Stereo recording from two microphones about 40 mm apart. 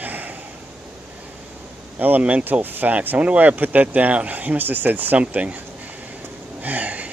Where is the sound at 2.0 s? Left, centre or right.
Right.